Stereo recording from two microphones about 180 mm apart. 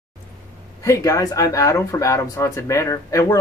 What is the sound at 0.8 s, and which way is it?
Speech, 20° left (ahead or behind).